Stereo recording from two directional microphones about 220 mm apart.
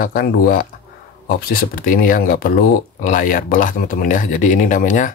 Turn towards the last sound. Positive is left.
turn(degrees=35)  # may be behind; listen again after turning